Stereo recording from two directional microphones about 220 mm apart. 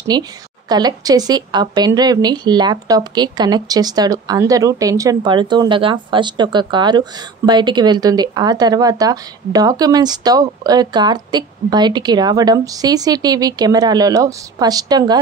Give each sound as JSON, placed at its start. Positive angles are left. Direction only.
{"t": 0.1, "sound": "a woman's voice", "side_deg": -20}